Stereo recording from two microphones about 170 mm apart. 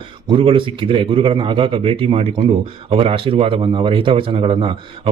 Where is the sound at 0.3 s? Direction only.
30° right (ahead or behind).